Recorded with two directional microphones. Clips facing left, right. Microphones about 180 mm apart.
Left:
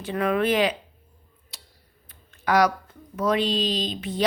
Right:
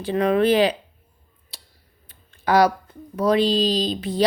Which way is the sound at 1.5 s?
30° right (ahead or behind).